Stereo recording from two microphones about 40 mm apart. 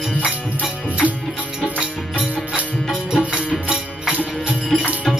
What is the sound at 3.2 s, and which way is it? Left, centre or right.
Music, right.